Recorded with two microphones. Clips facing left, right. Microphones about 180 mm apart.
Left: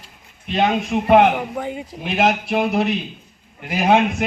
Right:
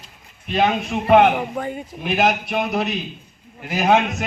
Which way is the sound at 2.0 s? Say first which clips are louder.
Left 1 dB; 25° left (ahead or behind).